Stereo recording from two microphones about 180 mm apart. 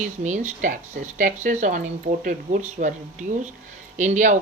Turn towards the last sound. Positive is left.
turn(degrees=-45)  # may be behind; listen again after turning